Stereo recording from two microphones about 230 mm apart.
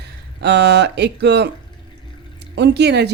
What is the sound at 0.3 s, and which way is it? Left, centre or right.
Speech, right.